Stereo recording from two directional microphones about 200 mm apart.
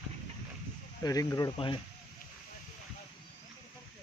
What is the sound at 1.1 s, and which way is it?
Speech, 20° left (ahead or behind).